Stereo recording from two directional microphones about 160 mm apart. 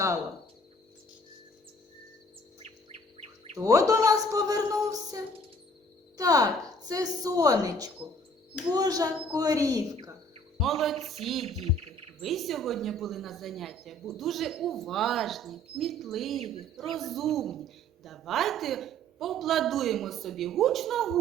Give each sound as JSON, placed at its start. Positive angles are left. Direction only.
{"t": 2.6, "sound": "chirp", "side_deg": -40}
{"t": 3.6, "sound": "a woman's voice", "side_deg": -20}
{"t": 10.6, "sound": "a woman's voice", "side_deg": 0}
{"t": 11.4, "sound": "speech", "side_deg": -40}
{"t": 12.2, "sound": "a woman's voice", "side_deg": 0}